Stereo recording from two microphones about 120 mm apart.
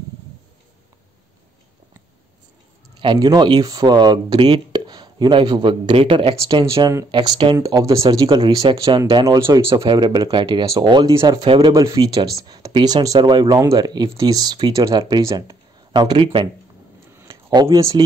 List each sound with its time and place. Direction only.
3.0 s speech: 45° right (ahead or behind)
6.4 s speech: 25° right (ahead or behind)
7.1 s speech: 40° right (ahead or behind)
7.5 s speech: 30° right (ahead or behind)
10.6 s speech: 25° right (ahead or behind)
10.9 s speech: 40° right (ahead or behind)
17.1 s a sound: 25° right (ahead or behind)